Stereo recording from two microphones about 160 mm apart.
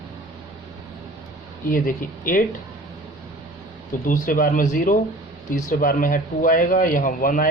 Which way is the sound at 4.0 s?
60° left (ahead or behind).